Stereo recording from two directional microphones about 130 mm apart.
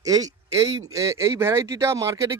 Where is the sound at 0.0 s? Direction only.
30° right (ahead or behind).